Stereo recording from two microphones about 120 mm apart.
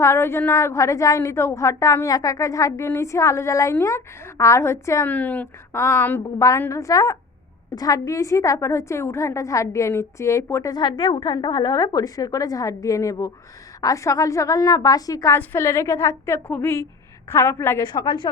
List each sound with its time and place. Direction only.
0.0 s a woman's voice: 20° left (ahead or behind)
5.0 s a woman's voice: 15° left (ahead or behind)
17.8 s a woman's voice: 40° left (ahead or behind)